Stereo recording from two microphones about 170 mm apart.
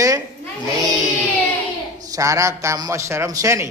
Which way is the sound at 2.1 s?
20° right (ahead or behind).